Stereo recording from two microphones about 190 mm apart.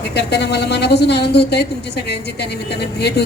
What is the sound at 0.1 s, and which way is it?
A woman's voice, 60° left (ahead or behind).